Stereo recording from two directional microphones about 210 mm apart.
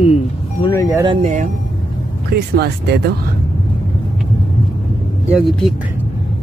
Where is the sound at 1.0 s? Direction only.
35° right (ahead or behind).